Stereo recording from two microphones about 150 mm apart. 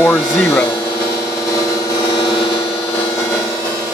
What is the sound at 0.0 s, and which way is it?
Speech, 10° left (ahead or behind).